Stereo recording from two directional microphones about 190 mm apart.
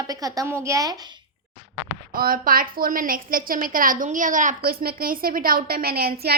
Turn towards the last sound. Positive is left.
turn(degrees=-55)  # may be behind; listen again after turning